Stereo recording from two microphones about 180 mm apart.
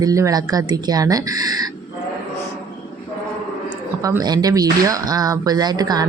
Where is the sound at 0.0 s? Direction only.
20° right (ahead or behind).